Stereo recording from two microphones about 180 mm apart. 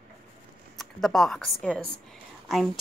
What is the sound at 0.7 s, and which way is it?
A woman's voice, centre (ahead or behind).